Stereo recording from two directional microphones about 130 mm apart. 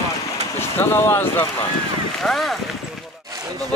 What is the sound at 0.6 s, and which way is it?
Speech, 20° left (ahead or behind).